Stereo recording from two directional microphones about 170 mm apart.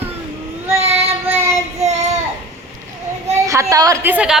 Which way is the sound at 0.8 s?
35° right (ahead or behind).